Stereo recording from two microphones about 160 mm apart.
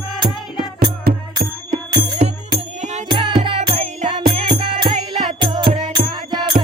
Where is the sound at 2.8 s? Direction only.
45° right (ahead or behind).